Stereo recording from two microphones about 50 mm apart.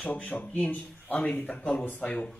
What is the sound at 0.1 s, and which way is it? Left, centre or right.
Speech, left.